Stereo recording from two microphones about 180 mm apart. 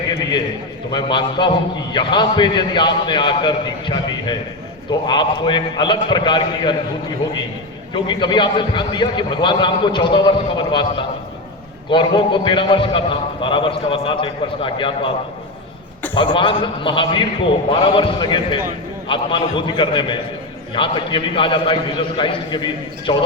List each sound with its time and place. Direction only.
0.1 s a sound: 25° left (ahead or behind)
0.9 s a man's voice: 25° left (ahead or behind)
7.9 s a man's voice: 25° left (ahead or behind)
16.1 s a man's voice: 25° left (ahead or behind)